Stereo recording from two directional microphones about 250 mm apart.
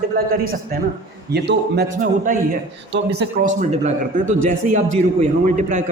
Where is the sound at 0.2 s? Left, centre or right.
Right.